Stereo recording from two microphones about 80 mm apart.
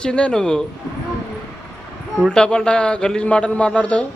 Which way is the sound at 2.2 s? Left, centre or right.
Centre.